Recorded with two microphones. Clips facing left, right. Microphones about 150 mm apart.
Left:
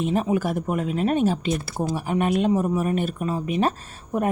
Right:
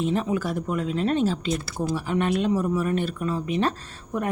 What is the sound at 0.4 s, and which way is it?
Speech, 50° left (ahead or behind).